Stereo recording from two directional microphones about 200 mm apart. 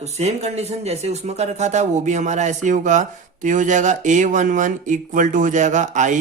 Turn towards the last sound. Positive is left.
turn(degrees=-40)  # may be behind; listen again after turning